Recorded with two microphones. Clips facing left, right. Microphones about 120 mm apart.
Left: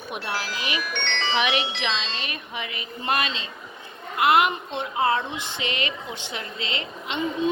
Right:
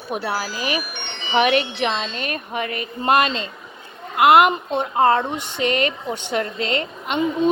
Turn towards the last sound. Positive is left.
turn(degrees=-50)  # may be behind; listen again after turning